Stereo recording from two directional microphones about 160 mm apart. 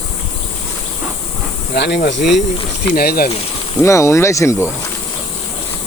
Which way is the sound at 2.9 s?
70° left (ahead or behind).